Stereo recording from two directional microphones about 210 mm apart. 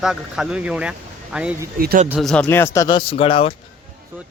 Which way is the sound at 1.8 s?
45° right (ahead or behind).